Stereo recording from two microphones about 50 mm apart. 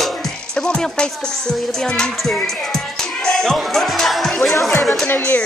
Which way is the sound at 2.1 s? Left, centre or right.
Centre.